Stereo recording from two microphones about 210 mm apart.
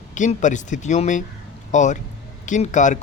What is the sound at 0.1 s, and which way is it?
Speech, 35° left (ahead or behind).